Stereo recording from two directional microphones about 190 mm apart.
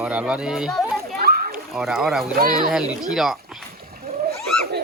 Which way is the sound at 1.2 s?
45° right (ahead or behind).